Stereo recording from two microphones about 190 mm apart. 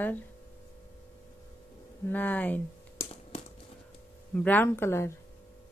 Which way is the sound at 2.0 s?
10° left (ahead or behind).